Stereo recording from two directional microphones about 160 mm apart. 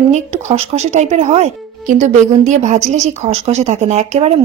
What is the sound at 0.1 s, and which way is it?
Speech, 45° right (ahead or behind).